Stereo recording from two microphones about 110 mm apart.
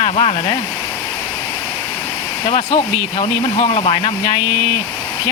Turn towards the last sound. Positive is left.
turn(degrees=65)  # may be behind; listen again after turning